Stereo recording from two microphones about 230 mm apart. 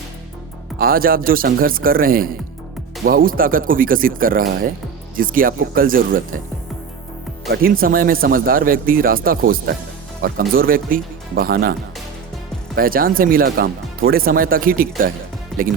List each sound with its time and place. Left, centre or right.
0.8 s speech: right
7.5 s speech: right
12.7 s speech: right
15.5 s music: centre